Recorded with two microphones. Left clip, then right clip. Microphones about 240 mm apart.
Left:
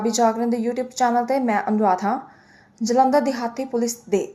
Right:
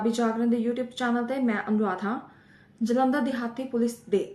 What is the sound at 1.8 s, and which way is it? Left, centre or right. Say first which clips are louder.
Speech: left 9 dB; left.